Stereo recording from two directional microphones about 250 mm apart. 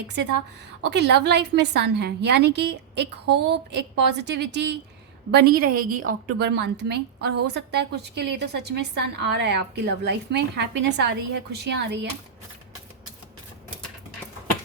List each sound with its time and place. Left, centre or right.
0.8 s a woman's voice: right